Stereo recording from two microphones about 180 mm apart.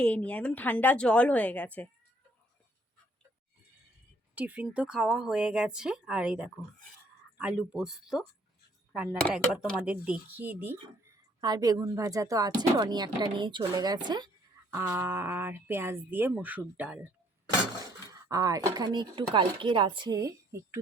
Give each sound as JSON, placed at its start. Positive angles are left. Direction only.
{"t": 0.0, "sound": "speech", "side_deg": 5}
{"t": 4.4, "sound": "speech", "side_deg": -10}
{"t": 9.2, "sound": "speech", "side_deg": 0}
{"t": 11.3, "sound": "speech", "side_deg": -25}
{"t": 14.8, "sound": "speech", "side_deg": -10}
{"t": 18.1, "sound": "speech", "side_deg": -20}